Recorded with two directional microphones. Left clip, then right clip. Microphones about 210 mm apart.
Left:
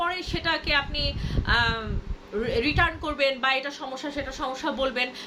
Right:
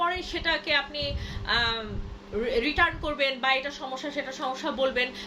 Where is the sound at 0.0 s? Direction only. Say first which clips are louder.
Even; 15° left (ahead or behind).